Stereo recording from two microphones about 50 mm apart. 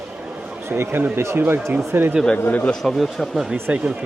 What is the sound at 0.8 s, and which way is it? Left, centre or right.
Speech, right.